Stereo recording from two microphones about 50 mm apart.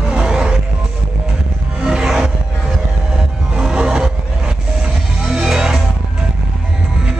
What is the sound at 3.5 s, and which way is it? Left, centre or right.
Music, centre.